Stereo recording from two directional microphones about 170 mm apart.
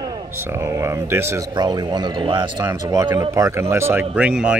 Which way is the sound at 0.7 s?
15° right (ahead or behind).